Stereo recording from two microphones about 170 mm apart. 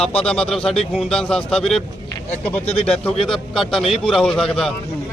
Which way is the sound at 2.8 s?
5° left (ahead or behind).